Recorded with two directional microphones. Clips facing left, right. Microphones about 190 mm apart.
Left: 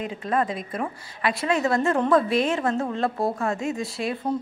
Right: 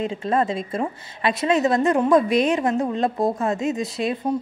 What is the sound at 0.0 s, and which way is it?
A woman's voice, 25° right (ahead or behind).